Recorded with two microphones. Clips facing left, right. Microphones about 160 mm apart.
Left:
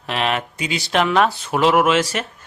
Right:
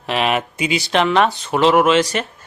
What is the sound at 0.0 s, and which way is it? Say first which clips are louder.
Speech: right 3 dB; 5° right (ahead or behind).